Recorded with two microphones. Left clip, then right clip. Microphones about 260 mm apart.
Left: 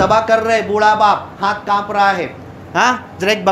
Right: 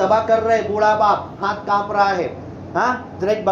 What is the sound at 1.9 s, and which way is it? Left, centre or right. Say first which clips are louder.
Speech: left 4 dB; left.